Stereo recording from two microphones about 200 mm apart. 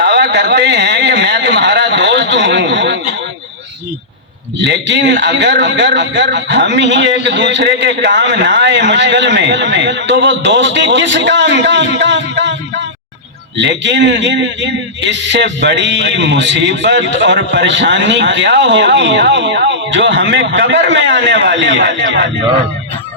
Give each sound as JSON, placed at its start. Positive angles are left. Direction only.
{"t": 0.0, "sound": "a sound", "side_deg": -60}
{"t": 4.5, "sound": "a man's voice", "side_deg": -60}
{"t": 13.6, "sound": "a man's voice", "side_deg": -60}